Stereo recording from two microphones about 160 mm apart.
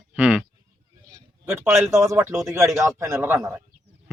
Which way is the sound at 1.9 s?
20° right (ahead or behind).